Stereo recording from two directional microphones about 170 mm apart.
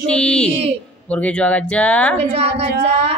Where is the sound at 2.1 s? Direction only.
35° right (ahead or behind).